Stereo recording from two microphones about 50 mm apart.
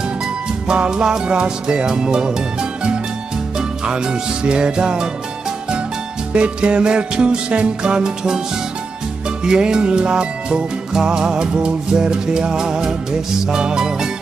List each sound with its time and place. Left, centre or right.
0.7 s music: centre
6.3 s music: right
9.4 s music: centre